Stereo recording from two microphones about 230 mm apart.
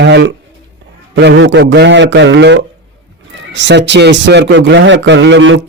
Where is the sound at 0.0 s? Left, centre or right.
Right.